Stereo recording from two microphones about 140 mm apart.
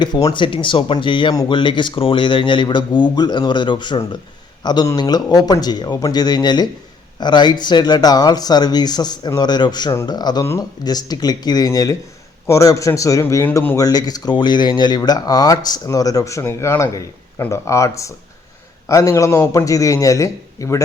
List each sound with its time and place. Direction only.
0.0 s a man's voice: 30° left (ahead or behind)